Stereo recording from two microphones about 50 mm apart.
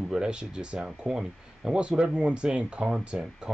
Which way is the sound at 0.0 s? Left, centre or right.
Centre.